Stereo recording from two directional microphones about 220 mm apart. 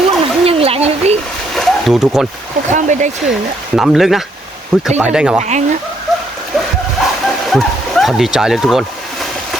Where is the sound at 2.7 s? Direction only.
35° right (ahead or behind).